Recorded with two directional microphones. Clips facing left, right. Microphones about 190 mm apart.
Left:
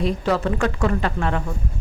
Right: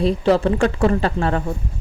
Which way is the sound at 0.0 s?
30° right (ahead or behind).